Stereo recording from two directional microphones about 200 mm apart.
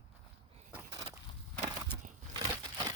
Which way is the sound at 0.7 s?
15° right (ahead or behind).